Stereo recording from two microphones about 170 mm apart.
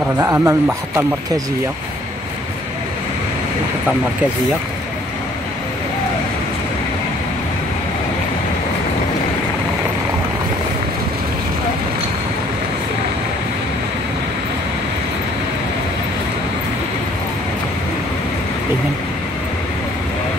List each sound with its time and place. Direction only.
0.2 s speech: 15° right (ahead or behind)